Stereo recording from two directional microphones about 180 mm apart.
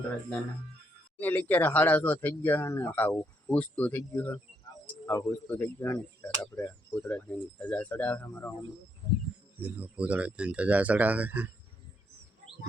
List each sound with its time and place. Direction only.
1.2 s speech: 10° left (ahead or behind)
9.6 s speech: 10° right (ahead or behind)